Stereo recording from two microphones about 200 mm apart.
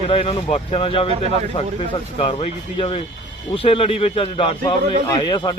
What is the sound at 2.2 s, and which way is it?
Speech, 25° left (ahead or behind).